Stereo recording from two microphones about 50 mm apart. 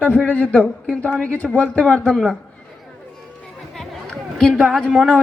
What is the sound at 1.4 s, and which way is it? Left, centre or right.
Speech, left.